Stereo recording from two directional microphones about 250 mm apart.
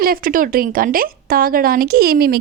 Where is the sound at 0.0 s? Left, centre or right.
Right.